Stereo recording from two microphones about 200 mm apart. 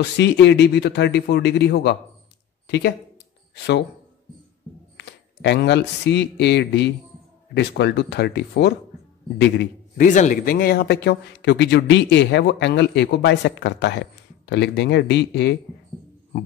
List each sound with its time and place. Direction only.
0.0 s speech: 60° left (ahead or behind)
2.6 s a sound: 60° left (ahead or behind)
3.5 s speech: 55° left (ahead or behind)
4.9 s speech: 60° left (ahead or behind)
9.9 s speech: 40° left (ahead or behind); by 15.5 s 60° left (ahead or behind)